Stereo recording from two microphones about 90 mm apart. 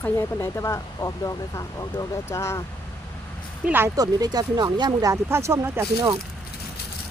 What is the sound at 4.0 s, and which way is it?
Speech, 45° right (ahead or behind).